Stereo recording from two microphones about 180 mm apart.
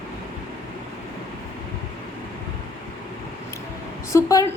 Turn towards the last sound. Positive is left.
turn(degrees=20)  # may be behind; listen again after turning